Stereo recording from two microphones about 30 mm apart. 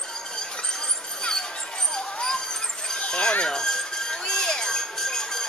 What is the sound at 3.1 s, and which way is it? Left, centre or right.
Speech, left.